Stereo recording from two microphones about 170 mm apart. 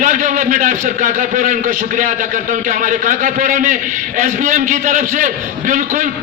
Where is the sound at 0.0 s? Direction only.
50° right (ahead or behind).